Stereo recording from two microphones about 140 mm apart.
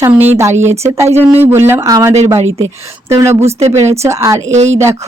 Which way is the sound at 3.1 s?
20° right (ahead or behind).